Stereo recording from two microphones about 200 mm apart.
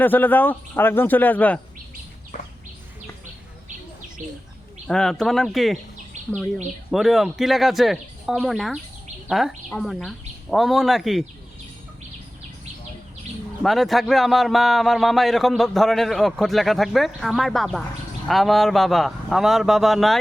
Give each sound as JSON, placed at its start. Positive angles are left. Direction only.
{"t": 0.0, "sound": "a man's voice", "side_deg": 10}
{"t": 4.9, "sound": "speech", "side_deg": 5}
{"t": 6.1, "sound": "a sound", "side_deg": -35}
{"t": 6.9, "sound": "speech", "side_deg": 0}
{"t": 13.6, "sound": "speech", "side_deg": 0}